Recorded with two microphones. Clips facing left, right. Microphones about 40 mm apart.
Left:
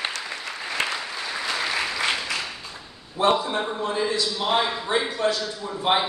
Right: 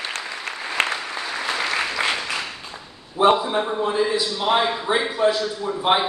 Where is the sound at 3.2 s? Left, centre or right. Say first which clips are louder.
Right 4 dB; centre.